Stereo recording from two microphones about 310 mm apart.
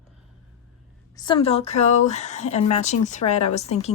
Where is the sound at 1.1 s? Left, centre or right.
Centre.